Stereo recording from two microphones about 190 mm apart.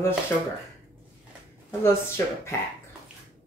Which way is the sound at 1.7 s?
15° left (ahead or behind).